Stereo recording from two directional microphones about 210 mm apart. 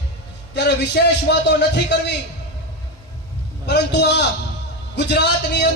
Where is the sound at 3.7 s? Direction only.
55° left (ahead or behind).